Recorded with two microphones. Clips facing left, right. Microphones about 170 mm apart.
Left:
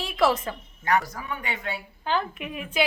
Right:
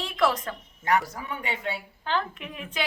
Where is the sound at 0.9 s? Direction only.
30° right (ahead or behind).